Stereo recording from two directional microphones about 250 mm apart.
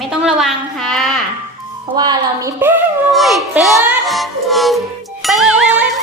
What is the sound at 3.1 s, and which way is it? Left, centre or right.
Music, centre.